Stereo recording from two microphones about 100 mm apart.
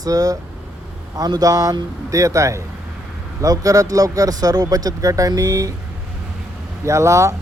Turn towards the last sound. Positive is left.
turn(degrees=-30)  # may be behind; listen again after turning